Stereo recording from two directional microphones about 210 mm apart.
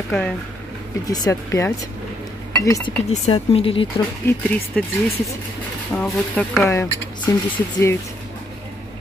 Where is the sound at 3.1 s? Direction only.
30° left (ahead or behind).